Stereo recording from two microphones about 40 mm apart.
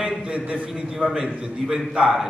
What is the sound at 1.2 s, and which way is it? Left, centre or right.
A man's voice, centre.